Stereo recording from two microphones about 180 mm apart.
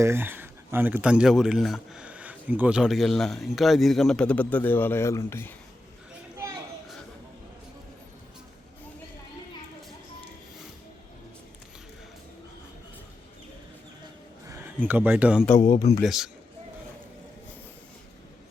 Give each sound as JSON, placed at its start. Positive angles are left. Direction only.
{"t": 0.0, "sound": "speech", "side_deg": -15}
{"t": 14.4, "sound": "speech", "side_deg": -15}
{"t": 15.5, "sound": "speech", "side_deg": 40}
{"t": 16.0, "sound": "speech", "side_deg": 0}